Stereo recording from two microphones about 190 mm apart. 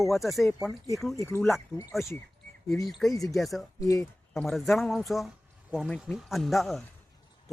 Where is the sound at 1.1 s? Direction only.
15° left (ahead or behind).